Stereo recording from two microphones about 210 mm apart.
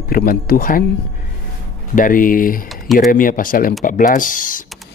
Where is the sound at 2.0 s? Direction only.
40° left (ahead or behind).